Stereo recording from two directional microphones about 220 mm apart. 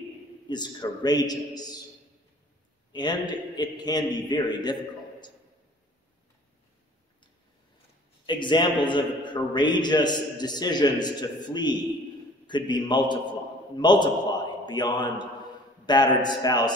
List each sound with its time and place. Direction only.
0.5 s a man's voice: 20° left (ahead or behind)
2.9 s a man's voice: 20° left (ahead or behind)
8.3 s a man's voice: 20° left (ahead or behind)